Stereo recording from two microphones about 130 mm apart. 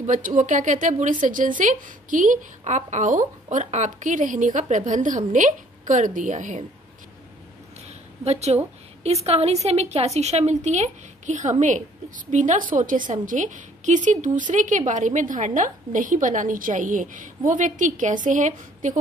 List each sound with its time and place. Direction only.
0.0 s a woman's voice: 85° right
8.2 s a woman's voice: 55° right (ahead or behind); by 18.9 s 75° right (ahead or behind)